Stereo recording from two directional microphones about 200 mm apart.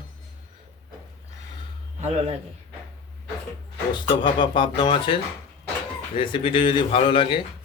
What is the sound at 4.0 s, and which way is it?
Speech, 25° left (ahead or behind).